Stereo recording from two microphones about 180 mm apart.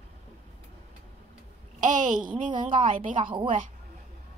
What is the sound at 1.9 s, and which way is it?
Speech, 45° right (ahead or behind).